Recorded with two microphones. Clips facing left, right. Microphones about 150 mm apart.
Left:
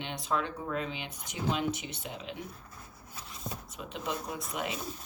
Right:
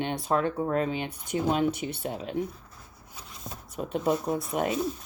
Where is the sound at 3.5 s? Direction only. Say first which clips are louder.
Left 1 dB; centre (ahead or behind).